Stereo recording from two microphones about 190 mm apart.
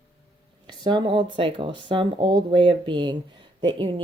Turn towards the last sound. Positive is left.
turn(degrees=-25)  # may be behind; listen again after turning